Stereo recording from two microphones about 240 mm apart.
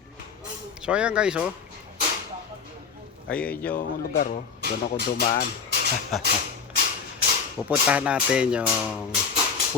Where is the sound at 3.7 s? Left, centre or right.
Left.